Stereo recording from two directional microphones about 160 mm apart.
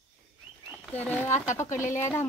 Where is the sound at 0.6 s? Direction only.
5° right (ahead or behind).